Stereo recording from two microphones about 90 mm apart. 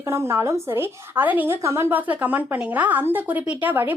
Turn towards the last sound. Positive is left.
turn(degrees=-20)  # may be behind; listen again after turning